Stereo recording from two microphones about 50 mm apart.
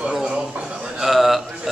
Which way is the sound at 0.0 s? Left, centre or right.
Centre.